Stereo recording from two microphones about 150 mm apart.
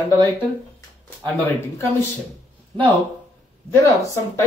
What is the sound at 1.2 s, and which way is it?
Speech, 10° left (ahead or behind).